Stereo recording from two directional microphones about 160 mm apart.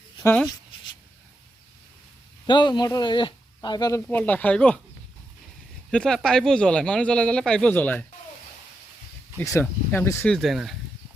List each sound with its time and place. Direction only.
0.2 s speech: 15° left (ahead or behind)
2.5 s speech: 30° left (ahead or behind)
4.0 s speech: 10° left (ahead or behind)
5.9 s speech: 5° left (ahead or behind)
9.4 s speech: 15° left (ahead or behind)
10.3 s speech: centre (ahead or behind)